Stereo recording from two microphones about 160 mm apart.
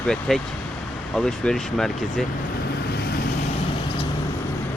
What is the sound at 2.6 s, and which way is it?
Vehicle, 80° left.